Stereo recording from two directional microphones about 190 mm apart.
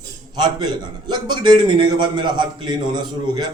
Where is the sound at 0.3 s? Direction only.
20° right (ahead or behind).